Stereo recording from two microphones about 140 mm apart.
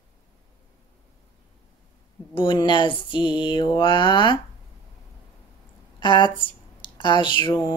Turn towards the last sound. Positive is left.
turn(degrees=35)  # may be behind; listen again after turning